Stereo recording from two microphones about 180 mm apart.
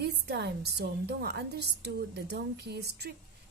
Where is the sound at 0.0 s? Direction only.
65° right (ahead or behind).